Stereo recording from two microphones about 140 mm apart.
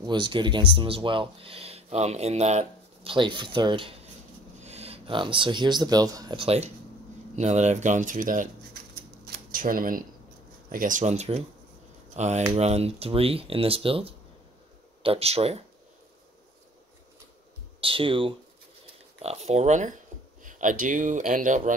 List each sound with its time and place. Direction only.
0.0 s speech: 30° right (ahead or behind)
4.6 s speech: 50° right (ahead or behind); by 6.3 s 25° right (ahead or behind)
6.3 s speech: 45° right (ahead or behind); by 8.5 s 70° right (ahead or behind)
9.5 s speech: 80° right
10.7 s speech: 70° right (ahead or behind); by 15.6 s 45° right (ahead or behind)
17.7 s speech: 40° right (ahead or behind)
19.2 s speech: 50° right (ahead or behind); by 21.7 s 65° right (ahead or behind)